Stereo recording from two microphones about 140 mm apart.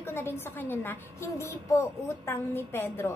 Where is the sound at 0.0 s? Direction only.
15° left (ahead or behind).